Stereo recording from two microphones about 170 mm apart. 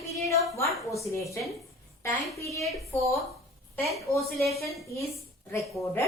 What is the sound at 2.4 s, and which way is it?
Speech, 15° left (ahead or behind).